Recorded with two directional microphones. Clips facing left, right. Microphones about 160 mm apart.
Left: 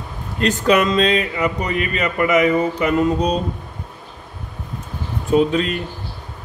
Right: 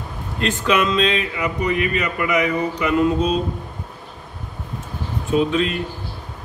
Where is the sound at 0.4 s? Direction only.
40° left (ahead or behind).